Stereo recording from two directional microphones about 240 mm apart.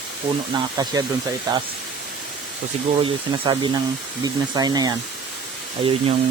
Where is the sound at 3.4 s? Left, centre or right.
Centre.